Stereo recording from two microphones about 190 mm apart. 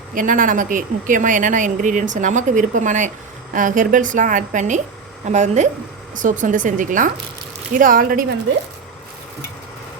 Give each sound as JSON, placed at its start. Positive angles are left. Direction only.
{"t": 0.1, "sound": "a woman's voice", "side_deg": -45}